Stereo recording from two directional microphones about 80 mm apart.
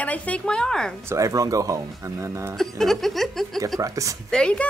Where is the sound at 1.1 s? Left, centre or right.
Right.